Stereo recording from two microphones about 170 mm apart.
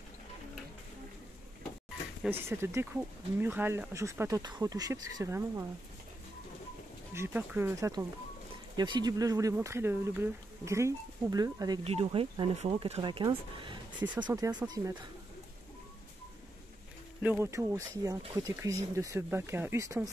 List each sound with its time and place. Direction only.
2.2 s speech: 15° right (ahead or behind)
7.2 s speech: 15° right (ahead or behind)
11.8 s speech: 35° right (ahead or behind)
13.9 s speech: 10° right (ahead or behind)
14.2 s speech: 25° right (ahead or behind)
17.2 s speech: 15° right (ahead or behind)